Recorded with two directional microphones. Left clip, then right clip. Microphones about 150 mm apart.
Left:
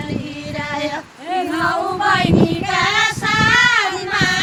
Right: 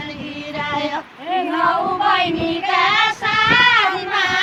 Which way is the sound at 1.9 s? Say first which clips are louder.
Left 1 dB; 5° right (ahead or behind).